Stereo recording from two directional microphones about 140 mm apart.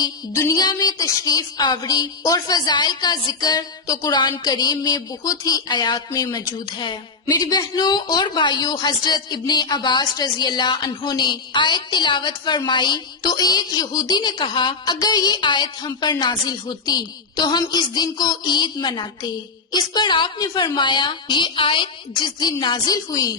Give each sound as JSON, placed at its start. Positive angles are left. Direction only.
{"t": 0.0, "sound": "a woman's voice", "side_deg": 25}